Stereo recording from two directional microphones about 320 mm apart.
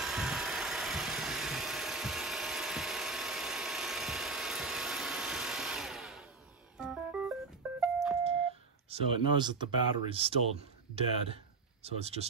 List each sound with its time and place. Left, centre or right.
0.0 s vehicle: centre
6.8 s music: centre
8.2 s speech: centre
11.8 s speech: centre